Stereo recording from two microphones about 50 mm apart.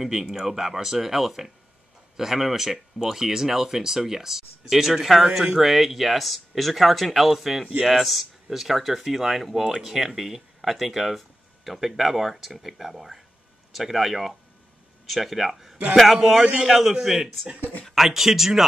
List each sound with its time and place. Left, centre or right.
0.0 s speech: centre